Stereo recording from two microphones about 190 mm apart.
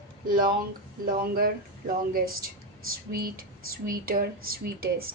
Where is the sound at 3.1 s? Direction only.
50° right (ahead or behind).